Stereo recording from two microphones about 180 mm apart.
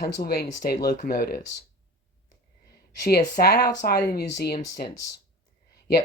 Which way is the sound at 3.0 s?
60° left (ahead or behind).